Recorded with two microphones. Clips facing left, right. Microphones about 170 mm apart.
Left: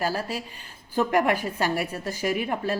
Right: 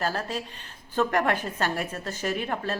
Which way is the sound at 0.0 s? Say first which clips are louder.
Left 1 dB; 10° left (ahead or behind).